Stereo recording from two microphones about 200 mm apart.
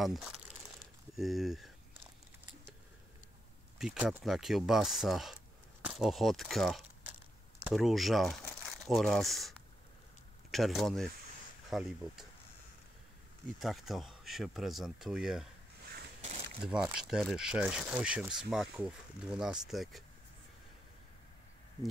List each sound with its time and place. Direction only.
0.0 s speech: centre (ahead or behind)
3.7 s speech: 5° right (ahead or behind)
13.6 s speech: centre (ahead or behind)
16.2 s a sound: 30° right (ahead or behind)
16.6 s speech: 5° right (ahead or behind)